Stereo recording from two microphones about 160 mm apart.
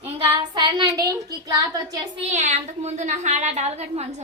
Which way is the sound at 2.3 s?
45° right (ahead or behind).